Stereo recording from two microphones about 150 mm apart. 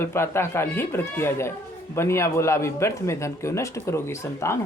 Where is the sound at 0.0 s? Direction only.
15° left (ahead or behind).